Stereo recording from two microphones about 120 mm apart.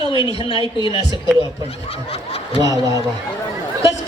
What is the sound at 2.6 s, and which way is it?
Speech, 30° right (ahead or behind).